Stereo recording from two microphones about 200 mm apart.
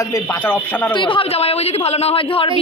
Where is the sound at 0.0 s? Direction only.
15° left (ahead or behind).